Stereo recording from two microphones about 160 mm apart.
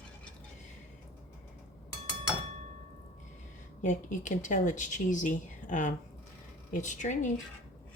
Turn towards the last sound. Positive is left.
turn(degrees=50)  # may be behind; listen again after turning